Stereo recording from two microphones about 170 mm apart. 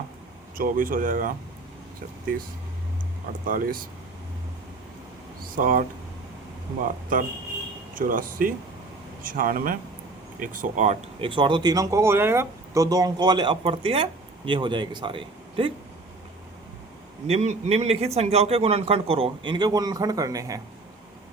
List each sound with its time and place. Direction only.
0.5 s speech: 55° right (ahead or behind)
3.4 s speech: 55° right (ahead or behind)
5.4 s a sound: 55° right (ahead or behind)
7.9 s speech: 55° right (ahead or behind)
11.2 s speech: 30° right (ahead or behind)
17.2 s a man's voice: 40° right (ahead or behind); by 20.6 s 20° right (ahead or behind)